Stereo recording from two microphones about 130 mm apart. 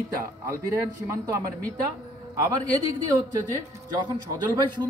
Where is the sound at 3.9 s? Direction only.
35° right (ahead or behind).